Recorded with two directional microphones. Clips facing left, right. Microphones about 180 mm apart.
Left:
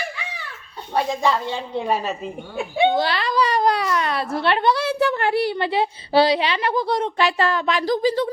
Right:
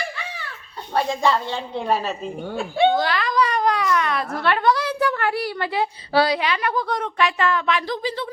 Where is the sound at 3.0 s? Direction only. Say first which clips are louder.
Left 1 dB; 30° left (ahead or behind).